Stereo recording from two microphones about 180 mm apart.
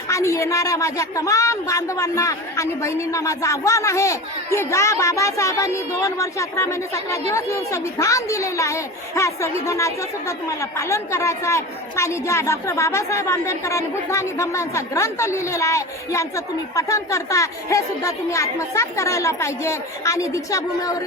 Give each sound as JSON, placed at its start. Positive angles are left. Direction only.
{"t": 0.1, "sound": "a woman's voice", "side_deg": 15}